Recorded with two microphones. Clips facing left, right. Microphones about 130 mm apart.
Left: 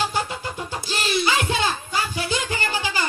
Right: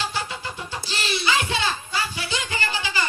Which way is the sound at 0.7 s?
45° left (ahead or behind).